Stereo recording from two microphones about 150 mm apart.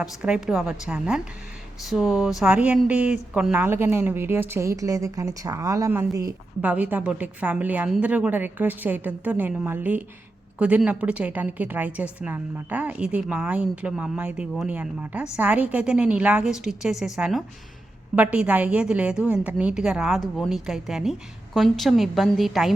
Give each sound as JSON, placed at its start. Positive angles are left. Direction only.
{"t": 0.0, "sound": "a woman's voice", "side_deg": -5}